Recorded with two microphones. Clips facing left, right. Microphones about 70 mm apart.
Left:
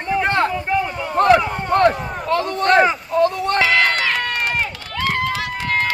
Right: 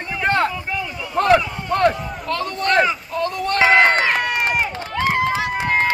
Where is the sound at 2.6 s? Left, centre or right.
Left.